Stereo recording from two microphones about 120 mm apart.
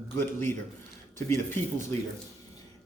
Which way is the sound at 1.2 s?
20° left (ahead or behind).